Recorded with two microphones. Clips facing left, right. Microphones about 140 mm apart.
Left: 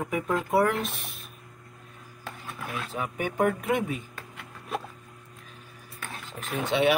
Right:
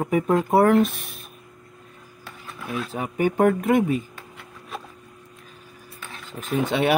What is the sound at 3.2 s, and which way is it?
Speech, 45° right (ahead or behind).